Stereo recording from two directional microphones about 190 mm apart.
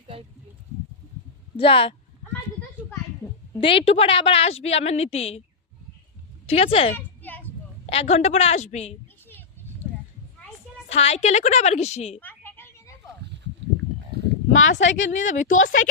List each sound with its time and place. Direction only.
1.5 s speech: 30° left (ahead or behind)
3.6 s a woman's voice: 30° left (ahead or behind)
6.5 s speech: 30° left (ahead or behind)
6.9 s a sound: 10° left (ahead or behind)
7.9 s a woman's voice: 35° left (ahead or behind)
10.8 s a woman's voice: 35° left (ahead or behind)
12.2 s a sound: 10° left (ahead or behind)
14.5 s speech: 90° left
15.1 s a woman's voice: 40° left (ahead or behind)